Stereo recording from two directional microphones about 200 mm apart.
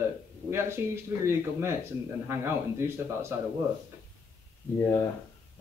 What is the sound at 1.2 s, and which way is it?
Speech, 15° right (ahead or behind).